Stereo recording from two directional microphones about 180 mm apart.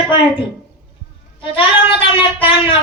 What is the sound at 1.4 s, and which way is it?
Speech, 30° left (ahead or behind).